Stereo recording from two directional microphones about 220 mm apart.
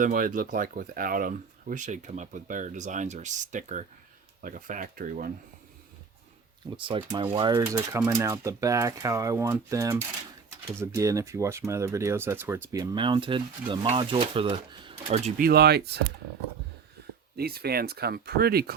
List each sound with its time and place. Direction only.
0.0 s speech: 40° right (ahead or behind)
6.8 s speech: 25° right (ahead or behind)
15.4 s speech: 45° right (ahead or behind)
17.3 s speech: 45° right (ahead or behind)